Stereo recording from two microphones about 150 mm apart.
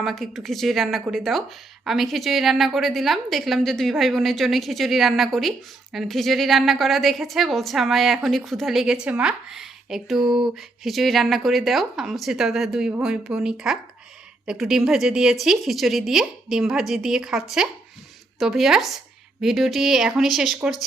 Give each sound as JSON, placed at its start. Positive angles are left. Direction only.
{"t": 0.0, "sound": "a woman's voice", "side_deg": 0}